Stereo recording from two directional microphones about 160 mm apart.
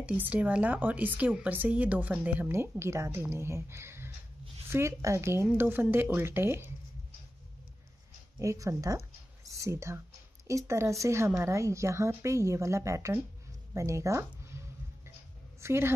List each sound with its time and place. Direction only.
0.0 s speech: 10° right (ahead or behind)
8.4 s speech: 20° right (ahead or behind)
15.6 s a woman's voice: 15° right (ahead or behind)